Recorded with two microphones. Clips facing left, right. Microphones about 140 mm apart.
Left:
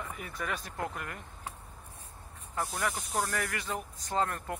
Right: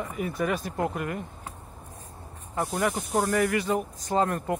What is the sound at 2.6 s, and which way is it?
Speech, 30° right (ahead or behind).